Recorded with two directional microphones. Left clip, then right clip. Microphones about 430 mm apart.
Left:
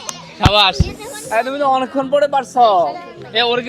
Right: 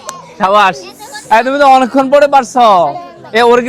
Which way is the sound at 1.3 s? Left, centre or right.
Right.